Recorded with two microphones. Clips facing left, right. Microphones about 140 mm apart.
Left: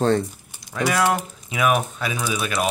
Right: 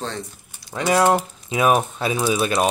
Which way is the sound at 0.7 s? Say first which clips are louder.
Right 3 dB; 30° right (ahead or behind).